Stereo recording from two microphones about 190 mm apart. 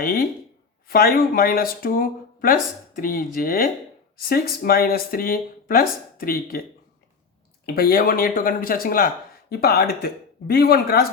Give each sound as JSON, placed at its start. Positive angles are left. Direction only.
{"t": 0.0, "sound": "speech", "side_deg": 50}
{"t": 7.7, "sound": "speech", "side_deg": 55}